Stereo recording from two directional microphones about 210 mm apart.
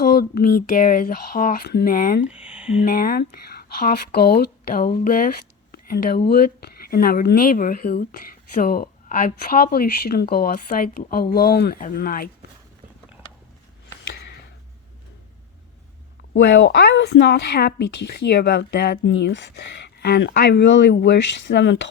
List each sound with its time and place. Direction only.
0.0 s speech: 45° left (ahead or behind)
2.2 s speech: 5° right (ahead or behind)
2.8 s speech: 45° left (ahead or behind)
14.1 s a sound: 55° left (ahead or behind)
16.3 s a woman's voice: 50° left (ahead or behind)